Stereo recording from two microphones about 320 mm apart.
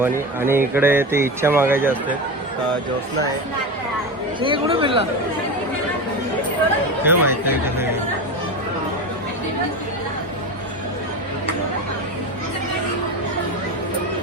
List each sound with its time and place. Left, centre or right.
0.0 s a man's voice: centre
4.4 s a man's voice: centre
7.0 s a man's voice: centre